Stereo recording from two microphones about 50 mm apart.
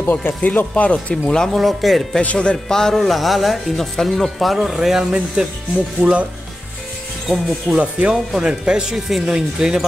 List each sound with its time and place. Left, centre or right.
0.0 s speech: left
0.7 s speech: left
1.1 s speech: centre
1.6 s speech: centre
6.0 s speech: centre
7.2 s speech: centre
7.7 s speech: right
8.8 s speech: centre